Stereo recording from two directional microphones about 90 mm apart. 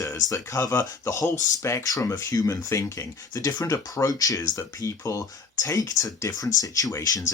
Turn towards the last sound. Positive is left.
turn(degrees=40)  # may be behind; listen again after turning